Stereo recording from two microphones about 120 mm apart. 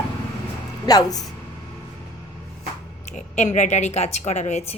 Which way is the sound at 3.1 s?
75° left (ahead or behind).